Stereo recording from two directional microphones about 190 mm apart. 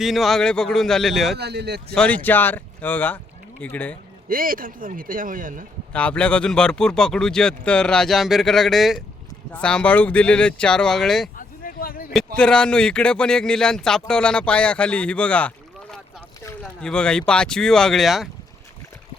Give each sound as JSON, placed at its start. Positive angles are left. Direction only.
{"t": 0.0, "sound": "speech", "side_deg": 0}
{"t": 1.4, "sound": "speech", "side_deg": -60}
{"t": 2.0, "sound": "speech", "side_deg": 5}
{"t": 4.3, "sound": "speech", "side_deg": -50}
{"t": 5.9, "sound": "speech", "side_deg": 5}
{"t": 11.3, "sound": "a sound", "side_deg": 50}
{"t": 12.4, "sound": "speech", "side_deg": 5}